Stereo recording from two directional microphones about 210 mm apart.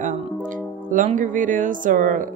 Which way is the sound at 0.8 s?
35° right (ahead or behind).